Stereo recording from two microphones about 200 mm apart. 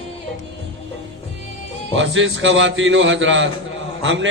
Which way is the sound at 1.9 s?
70° right (ahead or behind).